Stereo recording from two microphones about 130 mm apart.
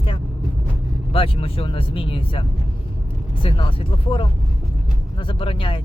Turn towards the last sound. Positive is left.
turn(degrees=40)  # may be behind; listen again after turning